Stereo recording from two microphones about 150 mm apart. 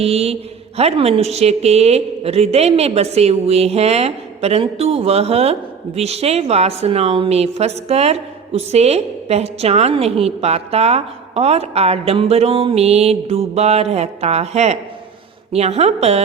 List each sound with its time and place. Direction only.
0.0 s a woman's voice: 40° right (ahead or behind)